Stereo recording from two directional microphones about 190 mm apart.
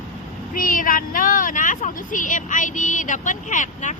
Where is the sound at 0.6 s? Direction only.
45° left (ahead or behind).